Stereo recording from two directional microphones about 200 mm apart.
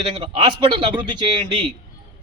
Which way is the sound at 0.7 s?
25° right (ahead or behind).